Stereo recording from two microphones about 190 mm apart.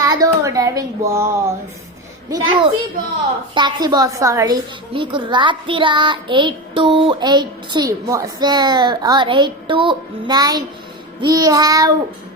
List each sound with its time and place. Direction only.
0.0 s speech: 20° right (ahead or behind)
2.3 s a child's voice: 25° right (ahead or behind)